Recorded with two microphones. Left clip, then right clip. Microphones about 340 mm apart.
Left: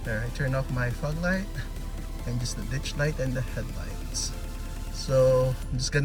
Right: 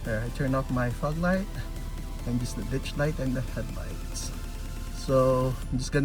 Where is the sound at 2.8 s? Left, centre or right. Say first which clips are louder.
Left 1 dB; centre.